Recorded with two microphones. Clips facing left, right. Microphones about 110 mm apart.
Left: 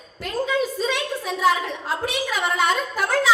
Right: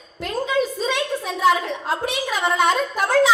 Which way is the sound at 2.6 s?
20° right (ahead or behind).